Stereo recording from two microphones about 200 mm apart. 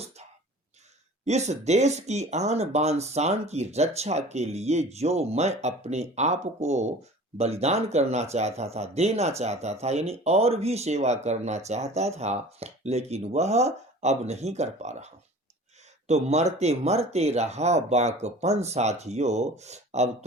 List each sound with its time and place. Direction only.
1.2 s speech: 35° right (ahead or behind)